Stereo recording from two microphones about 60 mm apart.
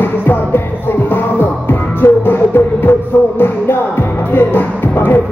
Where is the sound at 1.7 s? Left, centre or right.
Left.